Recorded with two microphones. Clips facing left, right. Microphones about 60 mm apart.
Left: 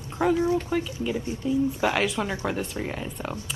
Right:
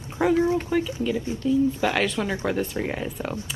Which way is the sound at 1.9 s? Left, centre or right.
Centre.